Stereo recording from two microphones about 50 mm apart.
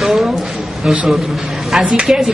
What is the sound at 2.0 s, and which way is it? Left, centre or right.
Speech, centre.